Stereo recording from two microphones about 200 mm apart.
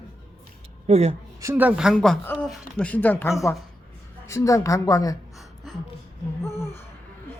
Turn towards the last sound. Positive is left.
turn(degrees=0)  # may be behind; listen again after turning